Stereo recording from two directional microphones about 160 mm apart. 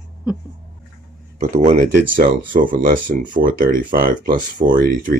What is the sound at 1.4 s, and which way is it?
Speech, 50° right (ahead or behind).